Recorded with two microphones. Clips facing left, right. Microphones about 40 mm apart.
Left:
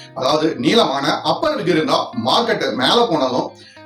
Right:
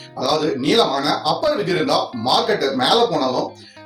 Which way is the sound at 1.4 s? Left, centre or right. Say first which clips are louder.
Left 2 dB; left.